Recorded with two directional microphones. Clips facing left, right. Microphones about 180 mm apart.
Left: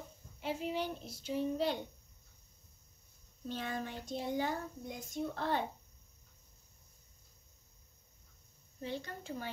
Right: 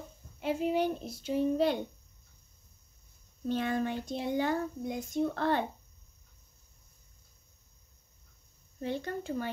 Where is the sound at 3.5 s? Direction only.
65° right (ahead or behind).